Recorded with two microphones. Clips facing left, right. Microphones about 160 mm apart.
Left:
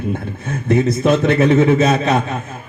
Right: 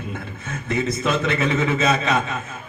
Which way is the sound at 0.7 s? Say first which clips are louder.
Left 8 dB; 60° left (ahead or behind).